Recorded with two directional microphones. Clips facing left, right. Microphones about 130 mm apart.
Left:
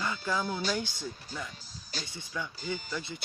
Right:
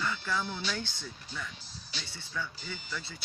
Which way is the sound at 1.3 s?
45° left (ahead or behind).